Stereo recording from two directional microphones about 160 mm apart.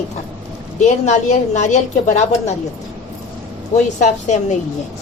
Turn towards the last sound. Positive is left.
turn(degrees=45)  # may be behind; listen again after turning